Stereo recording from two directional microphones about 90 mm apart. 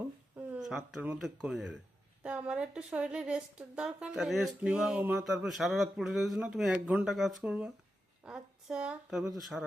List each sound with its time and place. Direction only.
0.4 s a sound: 15° right (ahead or behind)
1.2 s a woman's voice: 5° right (ahead or behind)
4.9 s a woman's voice: 15° right (ahead or behind)
5.2 s speech: 5° right (ahead or behind)